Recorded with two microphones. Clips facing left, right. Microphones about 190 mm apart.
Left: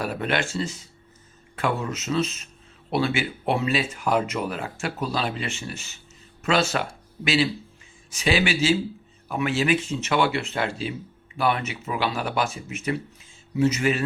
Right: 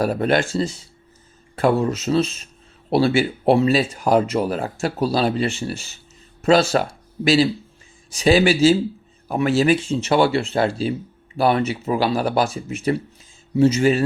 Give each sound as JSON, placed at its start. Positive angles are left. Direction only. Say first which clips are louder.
{"t": 0.0, "sound": "speech", "louder": "right 7 dB", "side_deg": -40}